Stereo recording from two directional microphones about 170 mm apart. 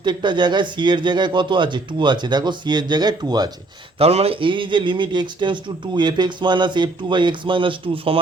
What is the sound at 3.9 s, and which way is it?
Speech, 35° right (ahead or behind).